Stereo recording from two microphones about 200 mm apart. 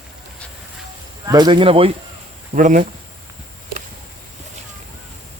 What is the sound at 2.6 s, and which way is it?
Speech, 40° right (ahead or behind).